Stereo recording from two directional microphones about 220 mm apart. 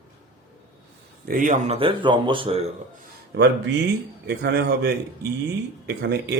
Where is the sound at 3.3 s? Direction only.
50° right (ahead or behind).